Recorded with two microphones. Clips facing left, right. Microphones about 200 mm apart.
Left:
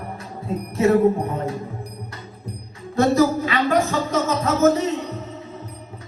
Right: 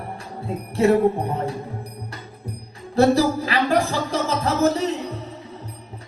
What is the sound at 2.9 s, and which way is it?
Speech, 30° right (ahead or behind).